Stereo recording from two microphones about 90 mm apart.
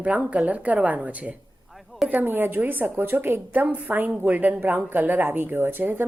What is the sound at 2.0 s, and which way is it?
A woman's voice, 20° right (ahead or behind).